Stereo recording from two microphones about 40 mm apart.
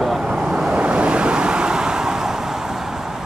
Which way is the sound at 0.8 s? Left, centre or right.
Right.